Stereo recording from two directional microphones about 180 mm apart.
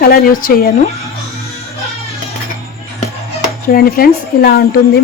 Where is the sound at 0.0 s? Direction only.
55° left (ahead or behind).